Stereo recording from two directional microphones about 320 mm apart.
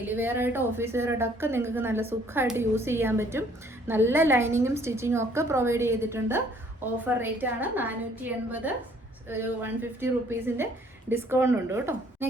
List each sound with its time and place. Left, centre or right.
0.0 s a woman's voice: centre